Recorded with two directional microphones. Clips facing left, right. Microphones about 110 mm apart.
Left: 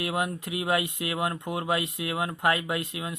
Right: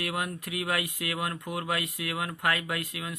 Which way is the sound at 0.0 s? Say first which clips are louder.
Left 4 dB; 25° left (ahead or behind).